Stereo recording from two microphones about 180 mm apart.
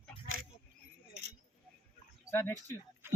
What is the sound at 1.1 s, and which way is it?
Keys jangling, 75° right (ahead or behind).